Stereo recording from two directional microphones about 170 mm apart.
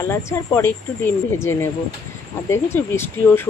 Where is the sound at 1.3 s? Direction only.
15° left (ahead or behind).